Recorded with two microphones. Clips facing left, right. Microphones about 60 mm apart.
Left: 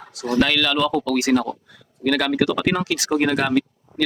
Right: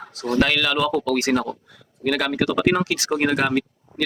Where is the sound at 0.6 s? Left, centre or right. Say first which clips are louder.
Left 1 dB; centre.